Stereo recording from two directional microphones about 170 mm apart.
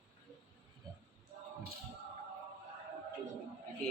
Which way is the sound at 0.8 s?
20° right (ahead or behind).